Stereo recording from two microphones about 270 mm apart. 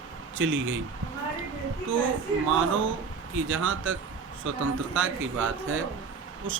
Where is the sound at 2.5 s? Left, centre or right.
Right.